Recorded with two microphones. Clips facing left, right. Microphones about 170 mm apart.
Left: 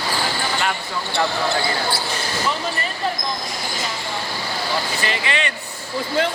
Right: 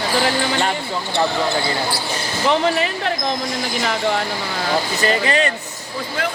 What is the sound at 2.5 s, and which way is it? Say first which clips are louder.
Speech: right 8 dB; 90° right.